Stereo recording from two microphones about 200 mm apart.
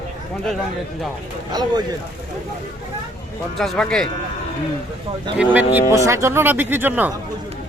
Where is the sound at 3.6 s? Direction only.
5° left (ahead or behind).